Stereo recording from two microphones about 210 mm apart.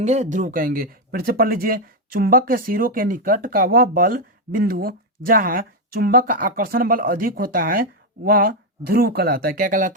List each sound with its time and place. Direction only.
0.0 s speech: 35° right (ahead or behind)